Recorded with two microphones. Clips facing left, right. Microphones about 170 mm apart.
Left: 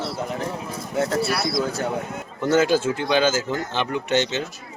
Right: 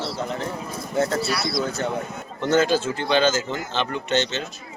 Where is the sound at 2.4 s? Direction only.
10° left (ahead or behind).